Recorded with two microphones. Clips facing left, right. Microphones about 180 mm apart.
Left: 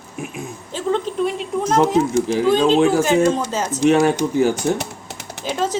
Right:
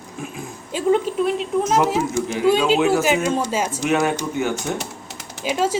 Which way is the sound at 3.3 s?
10° right (ahead or behind).